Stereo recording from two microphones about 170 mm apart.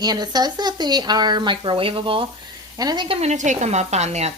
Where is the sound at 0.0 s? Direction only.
25° right (ahead or behind).